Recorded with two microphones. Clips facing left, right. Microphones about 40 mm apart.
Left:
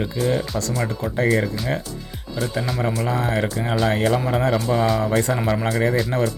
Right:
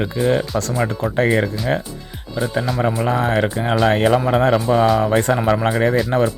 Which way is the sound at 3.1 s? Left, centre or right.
Right.